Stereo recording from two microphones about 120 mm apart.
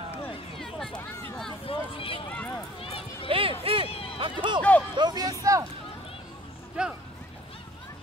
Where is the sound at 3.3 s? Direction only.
50° right (ahead or behind).